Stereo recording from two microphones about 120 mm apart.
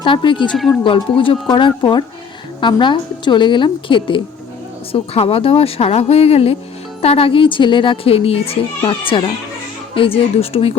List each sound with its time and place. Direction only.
0.0 s a woman's voice: 40° left (ahead or behind)